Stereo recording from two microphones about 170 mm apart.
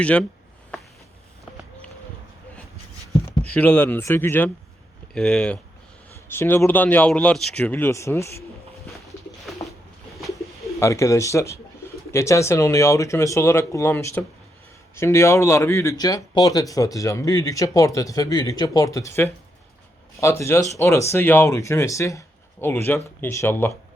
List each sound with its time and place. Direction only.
0.0 s speech: 5° left (ahead or behind)
3.2 s speech: 10° left (ahead or behind)
8.9 s pigeon: centre (ahead or behind)
10.8 s speech: 15° left (ahead or behind)